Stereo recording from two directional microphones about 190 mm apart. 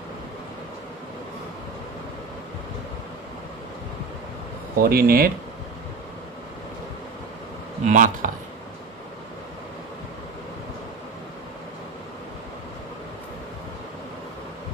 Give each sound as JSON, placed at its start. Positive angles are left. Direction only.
{"t": 4.7, "sound": "speech", "side_deg": -50}
{"t": 7.8, "sound": "speech", "side_deg": -45}